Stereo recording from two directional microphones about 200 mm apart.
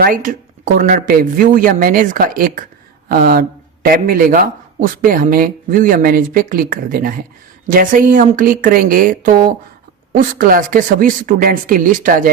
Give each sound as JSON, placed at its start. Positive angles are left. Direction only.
{"t": 0.0, "sound": "speech", "side_deg": -45}